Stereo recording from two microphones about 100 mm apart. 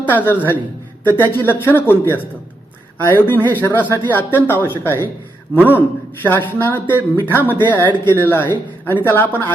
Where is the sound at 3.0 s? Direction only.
20° left (ahead or behind).